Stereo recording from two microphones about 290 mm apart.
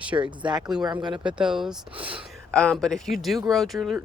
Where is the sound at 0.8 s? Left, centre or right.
Centre.